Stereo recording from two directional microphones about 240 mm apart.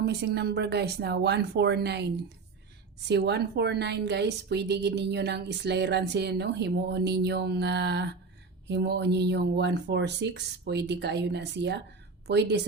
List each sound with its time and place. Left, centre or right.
0.0 s a woman's voice: right
3.1 s a woman's voice: right